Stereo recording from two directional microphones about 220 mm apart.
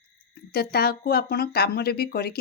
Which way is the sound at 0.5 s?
45° left (ahead or behind).